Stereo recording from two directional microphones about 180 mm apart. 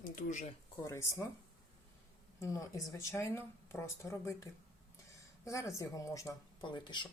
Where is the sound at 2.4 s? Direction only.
15° left (ahead or behind).